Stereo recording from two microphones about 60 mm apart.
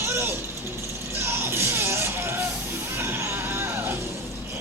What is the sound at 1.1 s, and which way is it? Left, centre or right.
Music, right.